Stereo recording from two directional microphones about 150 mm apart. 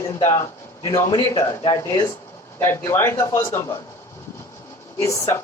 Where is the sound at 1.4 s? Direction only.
25° left (ahead or behind).